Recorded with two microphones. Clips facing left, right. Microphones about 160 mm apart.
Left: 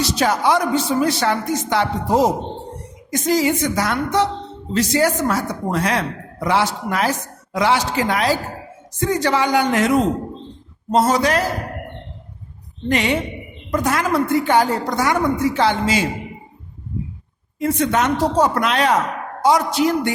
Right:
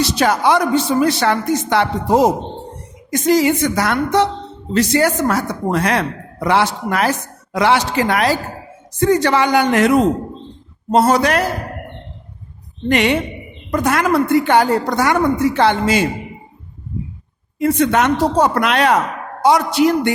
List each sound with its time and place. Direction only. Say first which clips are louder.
0.0 s speech: right 3 dB; 65° right (ahead or behind)
12.9 s speech: right 3 dB; 65° right (ahead or behind)
17.6 s a man's voice: right 4 dB; 65° right (ahead or behind)